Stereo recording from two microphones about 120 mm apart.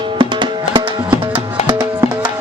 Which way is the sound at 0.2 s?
40° right (ahead or behind).